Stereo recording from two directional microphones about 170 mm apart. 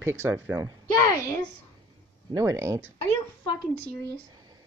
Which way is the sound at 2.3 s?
15° right (ahead or behind).